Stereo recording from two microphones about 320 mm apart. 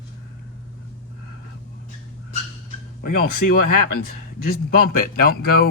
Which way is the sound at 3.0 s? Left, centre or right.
Left.